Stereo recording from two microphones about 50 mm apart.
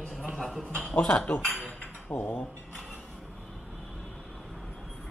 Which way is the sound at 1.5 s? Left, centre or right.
Left.